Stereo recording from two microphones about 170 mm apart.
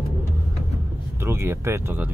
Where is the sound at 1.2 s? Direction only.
15° right (ahead or behind).